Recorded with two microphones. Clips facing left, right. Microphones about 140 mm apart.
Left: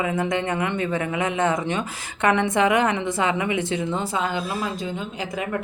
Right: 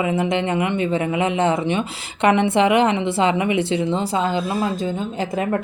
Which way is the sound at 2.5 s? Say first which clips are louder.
Right 4 dB; 30° right (ahead or behind).